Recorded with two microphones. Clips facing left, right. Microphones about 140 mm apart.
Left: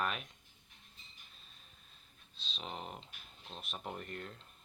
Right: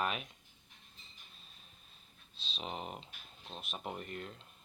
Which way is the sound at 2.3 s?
Centre (ahead or behind).